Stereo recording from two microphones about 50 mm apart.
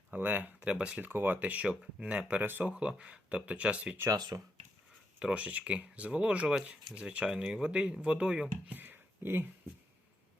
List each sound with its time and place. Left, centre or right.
0.1 s speech: right
0.6 s speech: right
1.0 s speech: right
1.4 s speech: right
1.6 s speech: centre
2.4 s speech: right
2.6 s speech: centre
4.3 s speech: right
5.2 s speech: right
8.7 s a sound: right